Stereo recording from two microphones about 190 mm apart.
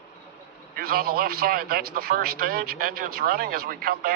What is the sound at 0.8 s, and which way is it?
A man's voice, 50° right (ahead or behind).